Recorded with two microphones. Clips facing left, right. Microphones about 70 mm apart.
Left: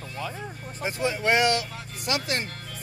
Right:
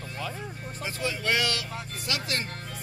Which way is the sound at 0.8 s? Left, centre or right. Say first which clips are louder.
Left 5 dB; left.